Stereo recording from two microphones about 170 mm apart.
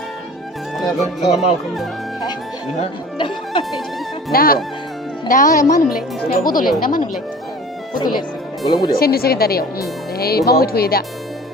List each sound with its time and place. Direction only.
0.8 s speech: centre (ahead or behind)
2.8 s speech: 30° left (ahead or behind)
3.6 s speech: centre (ahead or behind)
4.3 s speech: 60° left (ahead or behind)
5.9 s speech: centre (ahead or behind)
6.4 s speech: 55° left (ahead or behind)
7.9 s speech: 25° left (ahead or behind)
9.0 s speech: 65° left (ahead or behind)